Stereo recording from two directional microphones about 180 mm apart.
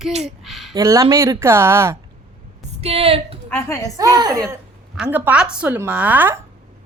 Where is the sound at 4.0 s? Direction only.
20° right (ahead or behind).